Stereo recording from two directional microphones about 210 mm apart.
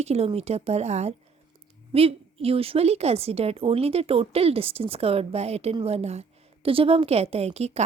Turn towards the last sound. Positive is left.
turn(degrees=-30)  # may be behind; listen again after turning